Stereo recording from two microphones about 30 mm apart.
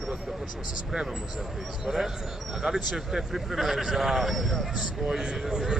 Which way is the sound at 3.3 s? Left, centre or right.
Centre.